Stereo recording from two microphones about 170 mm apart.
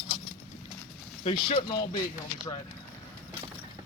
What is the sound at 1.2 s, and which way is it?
Speech, 30° left (ahead or behind).